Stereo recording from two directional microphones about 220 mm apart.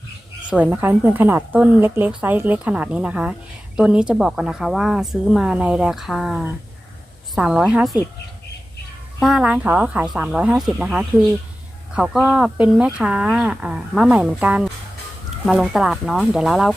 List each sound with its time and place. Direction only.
0.5 s a woman's voice: 10° right (ahead or behind)
9.2 s speech: 5° right (ahead or behind)